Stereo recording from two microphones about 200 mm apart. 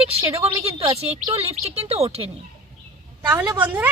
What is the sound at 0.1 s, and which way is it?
A woman's voice, 30° right (ahead or behind).